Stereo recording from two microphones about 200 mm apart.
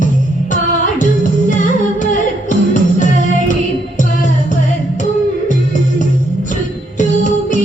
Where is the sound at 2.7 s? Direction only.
40° left (ahead or behind).